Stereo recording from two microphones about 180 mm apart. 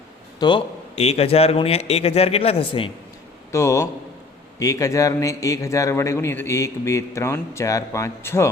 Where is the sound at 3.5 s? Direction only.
15° left (ahead or behind).